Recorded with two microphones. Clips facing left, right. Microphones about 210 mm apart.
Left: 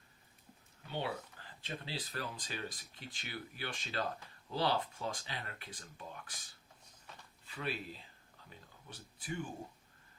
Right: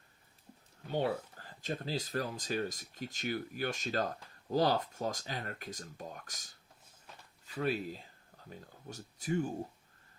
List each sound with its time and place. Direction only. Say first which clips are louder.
0.9 s speech: right 7 dB; 40° right (ahead or behind)